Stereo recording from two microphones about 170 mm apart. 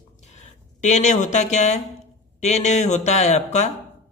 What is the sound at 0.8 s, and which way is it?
Speech, 45° left (ahead or behind).